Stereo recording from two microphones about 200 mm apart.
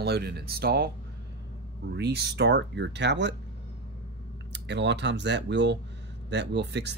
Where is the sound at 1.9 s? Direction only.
55° right (ahead or behind).